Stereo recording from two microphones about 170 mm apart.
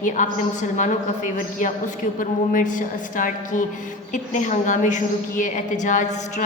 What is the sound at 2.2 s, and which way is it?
A woman's voice, 50° left (ahead or behind).